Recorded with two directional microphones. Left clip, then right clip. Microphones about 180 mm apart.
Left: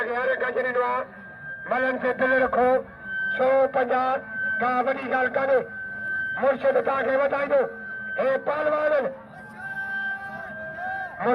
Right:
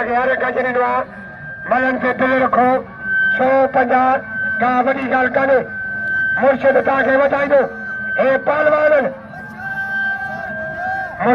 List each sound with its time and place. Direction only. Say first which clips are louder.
0.0 s speech: right 8 dB; 30° left (ahead or behind)
9.7 s music: right 9 dB; 35° left (ahead or behind)